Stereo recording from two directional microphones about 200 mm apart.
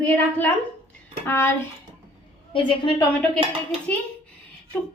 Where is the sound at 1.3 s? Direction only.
10° left (ahead or behind).